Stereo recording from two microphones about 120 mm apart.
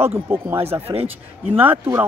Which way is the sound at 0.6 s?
55° right (ahead or behind).